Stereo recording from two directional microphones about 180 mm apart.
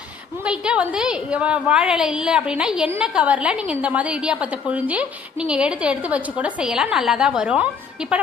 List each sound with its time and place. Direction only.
0.4 s a woman's voice: 5° right (ahead or behind)